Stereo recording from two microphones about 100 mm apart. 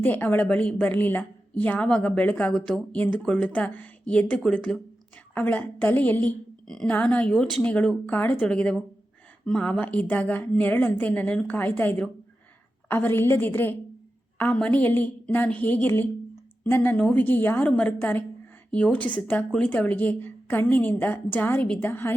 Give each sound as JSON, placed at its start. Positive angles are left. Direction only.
{"t": 0.0, "sound": "a woman's voice", "side_deg": 15}